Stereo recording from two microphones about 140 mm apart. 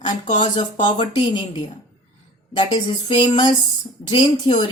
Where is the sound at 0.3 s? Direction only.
35° left (ahead or behind).